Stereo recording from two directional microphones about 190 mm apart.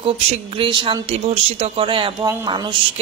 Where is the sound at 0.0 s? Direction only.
30° right (ahead or behind).